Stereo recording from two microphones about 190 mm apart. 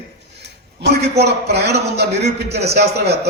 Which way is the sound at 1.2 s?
60° right (ahead or behind).